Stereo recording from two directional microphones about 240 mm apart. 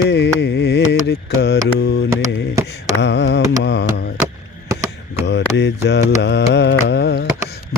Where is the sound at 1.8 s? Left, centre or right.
Left.